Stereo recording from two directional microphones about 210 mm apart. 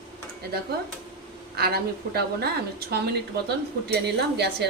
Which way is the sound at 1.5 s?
50° right (ahead or behind).